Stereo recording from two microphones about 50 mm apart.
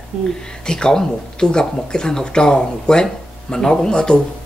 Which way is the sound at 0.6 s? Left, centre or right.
Centre.